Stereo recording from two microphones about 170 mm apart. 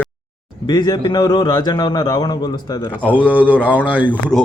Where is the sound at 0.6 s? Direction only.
25° left (ahead or behind).